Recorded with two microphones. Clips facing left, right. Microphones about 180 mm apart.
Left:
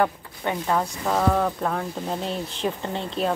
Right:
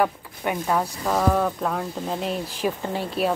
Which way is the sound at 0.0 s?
5° right (ahead or behind).